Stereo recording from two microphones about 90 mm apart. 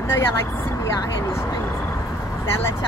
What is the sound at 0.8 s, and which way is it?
Speech, 40° left (ahead or behind).